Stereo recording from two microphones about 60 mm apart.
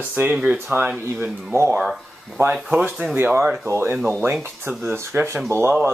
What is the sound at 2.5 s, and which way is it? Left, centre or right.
Speech, centre.